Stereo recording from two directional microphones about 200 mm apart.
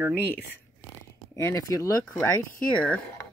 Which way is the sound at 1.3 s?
15° left (ahead or behind).